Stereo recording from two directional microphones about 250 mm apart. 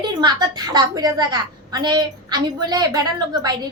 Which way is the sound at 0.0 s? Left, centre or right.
Centre.